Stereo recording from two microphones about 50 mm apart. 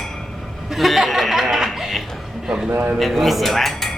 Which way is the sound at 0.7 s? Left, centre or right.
Centre.